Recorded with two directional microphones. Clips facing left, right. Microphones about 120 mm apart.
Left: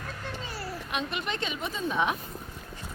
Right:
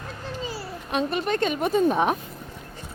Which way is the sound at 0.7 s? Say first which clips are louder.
Right 7 dB; 35° right (ahead or behind).